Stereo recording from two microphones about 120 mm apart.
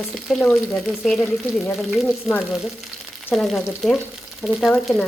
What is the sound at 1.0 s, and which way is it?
Speech, 5° left (ahead or behind).